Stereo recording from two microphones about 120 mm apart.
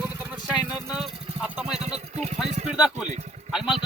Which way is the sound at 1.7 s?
65° right (ahead or behind).